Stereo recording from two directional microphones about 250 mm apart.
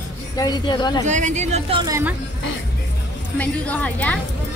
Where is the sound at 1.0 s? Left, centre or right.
Right; by 2.2 s centre.